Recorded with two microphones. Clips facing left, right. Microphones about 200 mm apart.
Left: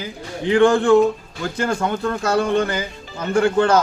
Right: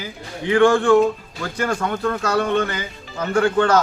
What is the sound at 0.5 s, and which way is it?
Speech, 20° left (ahead or behind).